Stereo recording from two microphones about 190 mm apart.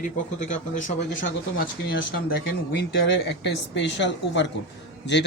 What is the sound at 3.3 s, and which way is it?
Speech, 65° left (ahead or behind).